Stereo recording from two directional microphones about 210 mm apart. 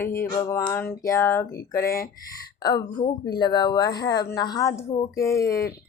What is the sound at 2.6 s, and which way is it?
Speech, 20° left (ahead or behind).